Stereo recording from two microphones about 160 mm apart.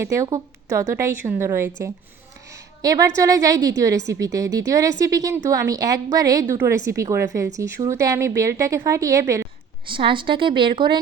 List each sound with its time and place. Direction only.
0.0 s a woman's voice: 20° right (ahead or behind)
2.5 s a sound: 20° right (ahead or behind)
3.2 s a woman's voice: 20° right (ahead or behind)
9.9 s a woman's voice: 30° right (ahead or behind)